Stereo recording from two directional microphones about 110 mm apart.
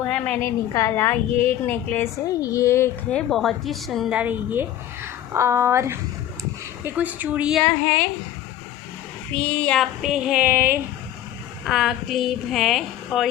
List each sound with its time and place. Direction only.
0.3 s a woman's voice: 25° left (ahead or behind)
2.4 s a woman's voice: 30° left (ahead or behind)
3.1 s speech: 5° left (ahead or behind)
4.1 s a woman's voice: 15° right (ahead or behind)
7.7 s speech: 15° left (ahead or behind)
9.3 s speech: 10° left (ahead or behind); by 10.8 s 20° right (ahead or behind)
11.6 s speech: centre (ahead or behind)